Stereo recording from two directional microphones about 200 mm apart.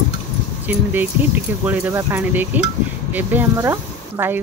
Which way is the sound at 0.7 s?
10° right (ahead or behind).